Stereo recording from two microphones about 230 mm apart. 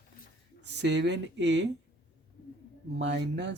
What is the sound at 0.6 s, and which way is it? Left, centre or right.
Speech, right.